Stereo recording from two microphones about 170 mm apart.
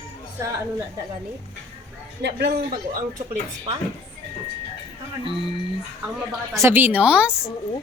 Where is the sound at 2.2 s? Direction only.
80° right.